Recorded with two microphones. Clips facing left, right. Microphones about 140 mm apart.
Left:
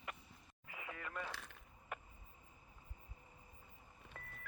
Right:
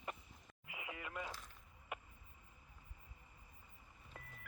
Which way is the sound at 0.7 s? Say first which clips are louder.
Even; 10° right (ahead or behind).